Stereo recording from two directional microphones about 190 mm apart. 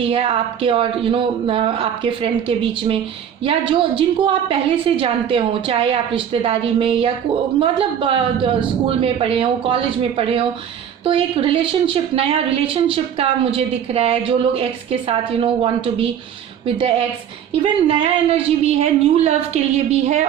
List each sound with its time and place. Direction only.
0.0 s a woman's voice: 30° right (ahead or behind)